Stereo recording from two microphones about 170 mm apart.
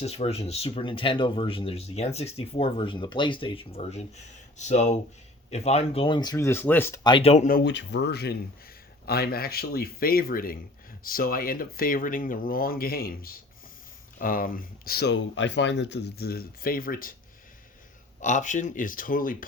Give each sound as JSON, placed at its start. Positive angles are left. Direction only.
{"t": 0.0, "sound": "speech", "side_deg": 40}
{"t": 6.3, "sound": "speech", "side_deg": 15}
{"t": 7.0, "sound": "speech", "side_deg": 30}
{"t": 7.6, "sound": "speech", "side_deg": 90}
{"t": 18.2, "sound": "speech", "side_deg": 45}